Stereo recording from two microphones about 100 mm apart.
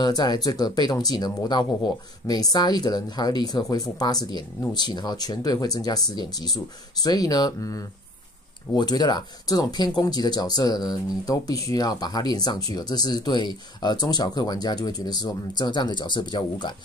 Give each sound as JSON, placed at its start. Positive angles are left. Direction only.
{"t": 0.0, "sound": "speech", "side_deg": 45}